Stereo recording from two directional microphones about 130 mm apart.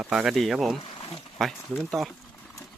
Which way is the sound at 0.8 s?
45° left (ahead or behind).